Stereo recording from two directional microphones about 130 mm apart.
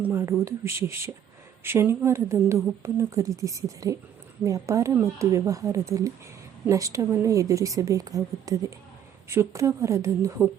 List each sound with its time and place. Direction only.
0.0 s speech: 20° right (ahead or behind)